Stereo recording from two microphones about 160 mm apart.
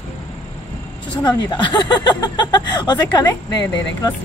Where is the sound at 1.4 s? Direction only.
25° left (ahead or behind).